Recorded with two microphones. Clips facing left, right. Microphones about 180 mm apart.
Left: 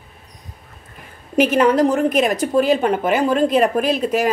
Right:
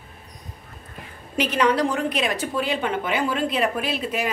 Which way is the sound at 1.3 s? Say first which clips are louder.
Left 6 dB; 50° left (ahead or behind).